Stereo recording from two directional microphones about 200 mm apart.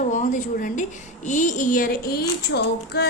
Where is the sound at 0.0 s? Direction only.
40° left (ahead or behind).